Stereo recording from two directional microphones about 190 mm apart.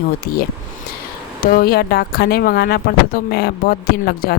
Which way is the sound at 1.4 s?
50° left (ahead or behind).